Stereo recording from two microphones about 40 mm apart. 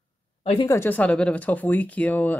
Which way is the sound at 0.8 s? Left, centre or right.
Left.